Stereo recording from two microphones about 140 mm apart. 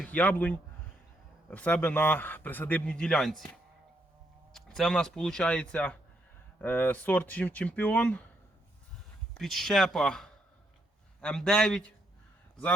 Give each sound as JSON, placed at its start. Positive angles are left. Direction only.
{"t": 0.0, "sound": "a man's voice", "side_deg": 10}
{"t": 4.5, "sound": "a man's voice", "side_deg": 5}
{"t": 9.3, "sound": "speech", "side_deg": 0}